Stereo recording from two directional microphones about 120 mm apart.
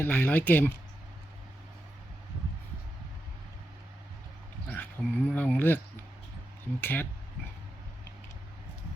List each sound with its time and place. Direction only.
0.0 s speech: 15° left (ahead or behind)
4.7 s speech: 15° left (ahead or behind)
6.8 s speech: 15° left (ahead or behind)